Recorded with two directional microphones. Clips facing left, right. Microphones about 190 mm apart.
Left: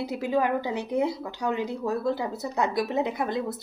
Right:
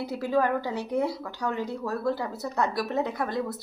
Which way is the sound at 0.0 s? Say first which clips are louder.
Even; 15° left (ahead or behind).